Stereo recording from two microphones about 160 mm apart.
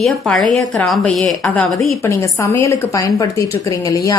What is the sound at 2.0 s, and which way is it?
A woman's voice, 20° left (ahead or behind).